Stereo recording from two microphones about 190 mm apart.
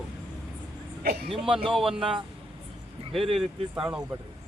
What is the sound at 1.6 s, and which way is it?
Speech, centre (ahead or behind).